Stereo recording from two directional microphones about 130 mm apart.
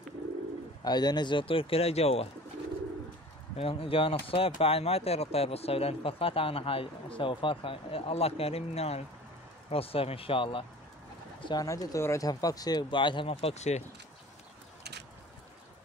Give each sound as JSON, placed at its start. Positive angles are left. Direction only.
{"t": 0.8, "sound": "speech", "side_deg": 30}
{"t": 3.5, "sound": "speech", "side_deg": 45}
{"t": 11.4, "sound": "speech", "side_deg": 25}